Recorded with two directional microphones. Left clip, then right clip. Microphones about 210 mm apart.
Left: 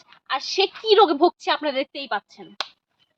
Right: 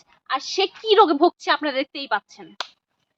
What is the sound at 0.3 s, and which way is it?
A woman's voice, 10° right (ahead or behind).